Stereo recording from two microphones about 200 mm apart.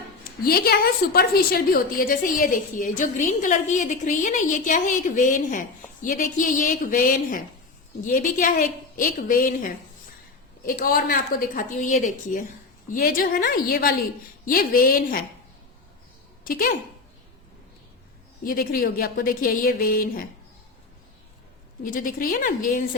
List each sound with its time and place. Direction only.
0.3 s a woman's voice: 50° left (ahead or behind)
16.4 s a woman's voice: 45° left (ahead or behind)
18.4 s a woman's voice: 45° left (ahead or behind)
21.8 s a woman's voice: 45° left (ahead or behind)